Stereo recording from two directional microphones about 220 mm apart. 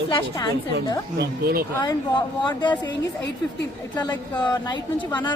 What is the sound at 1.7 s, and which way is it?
A woman's voice, 20° left (ahead or behind).